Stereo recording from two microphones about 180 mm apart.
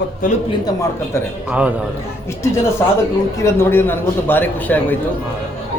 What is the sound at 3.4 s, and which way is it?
A man's voice, 10° left (ahead or behind).